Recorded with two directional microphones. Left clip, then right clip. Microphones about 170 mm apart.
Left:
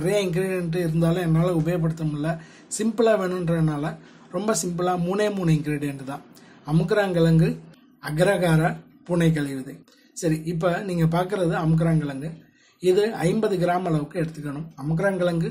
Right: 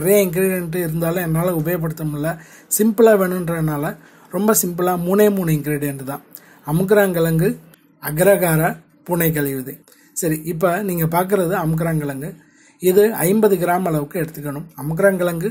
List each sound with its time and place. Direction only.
0.0 s a man's voice: 40° right (ahead or behind)